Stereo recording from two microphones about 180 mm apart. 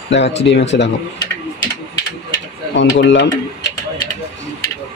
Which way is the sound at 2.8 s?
80° left.